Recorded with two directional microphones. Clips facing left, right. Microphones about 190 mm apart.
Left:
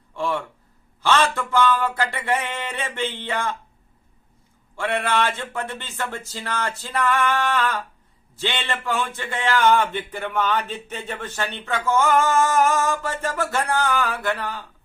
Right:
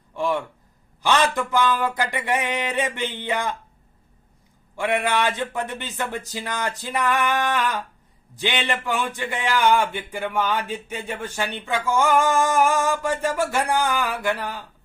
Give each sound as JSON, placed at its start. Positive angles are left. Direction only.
{"t": 0.2, "sound": "a man's voice", "side_deg": -15}
{"t": 4.8, "sound": "a man's voice", "side_deg": -15}